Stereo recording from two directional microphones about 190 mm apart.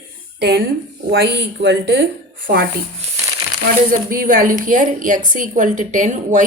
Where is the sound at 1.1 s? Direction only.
65° right (ahead or behind).